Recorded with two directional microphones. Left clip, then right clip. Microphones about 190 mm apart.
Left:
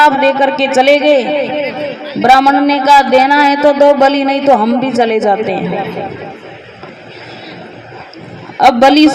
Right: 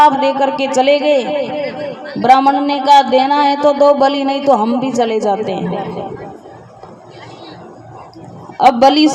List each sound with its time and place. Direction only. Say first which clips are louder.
0.0 s a man's voice: left 2 dB; 35° left (ahead or behind)
8.5 s a man's voice: left 2 dB; 35° left (ahead or behind)